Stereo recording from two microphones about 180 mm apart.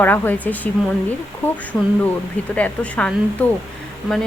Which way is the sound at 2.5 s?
5° left (ahead or behind).